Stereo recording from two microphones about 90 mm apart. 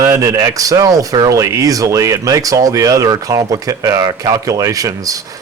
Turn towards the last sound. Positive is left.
turn(degrees=-40)  # may be behind; listen again after turning